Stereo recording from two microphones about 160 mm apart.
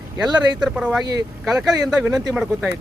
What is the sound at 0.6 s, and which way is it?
Speech, 5° right (ahead or behind).